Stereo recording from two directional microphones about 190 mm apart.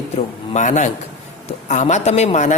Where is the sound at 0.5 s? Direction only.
40° left (ahead or behind).